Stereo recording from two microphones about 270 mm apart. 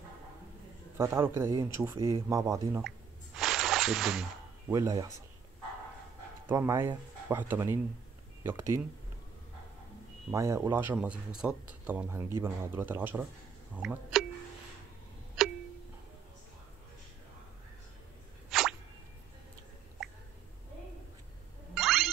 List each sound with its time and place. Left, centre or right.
0.9 s a man's voice: centre
3.3 s snake: centre
4.7 s a man's voice: centre
6.4 s a man's voice: centre
10.3 s a man's voice: centre
15.4 s clock: centre
18.5 s plop: centre
21.7 s ding: centre